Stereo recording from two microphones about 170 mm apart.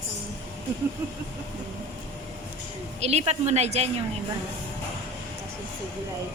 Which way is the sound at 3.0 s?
40° right (ahead or behind).